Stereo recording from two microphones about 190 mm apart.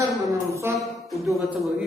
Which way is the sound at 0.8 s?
Centre (ahead or behind).